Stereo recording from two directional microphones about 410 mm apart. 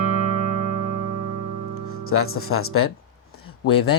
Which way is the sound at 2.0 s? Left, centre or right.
Left.